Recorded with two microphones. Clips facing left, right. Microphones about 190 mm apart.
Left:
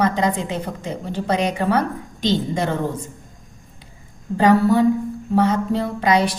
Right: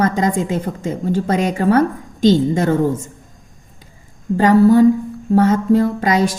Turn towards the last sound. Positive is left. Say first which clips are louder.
# right 2 dB
turn(degrees=-45)  # may be behind; listen again after turning